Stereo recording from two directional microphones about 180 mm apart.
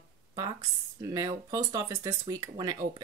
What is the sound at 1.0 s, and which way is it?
A woman's voice, 20° right (ahead or behind).